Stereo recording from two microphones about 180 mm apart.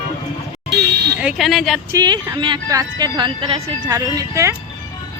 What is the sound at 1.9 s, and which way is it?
Speech, 25° right (ahead or behind).